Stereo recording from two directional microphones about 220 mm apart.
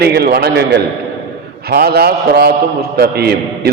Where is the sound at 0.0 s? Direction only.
45° right (ahead or behind).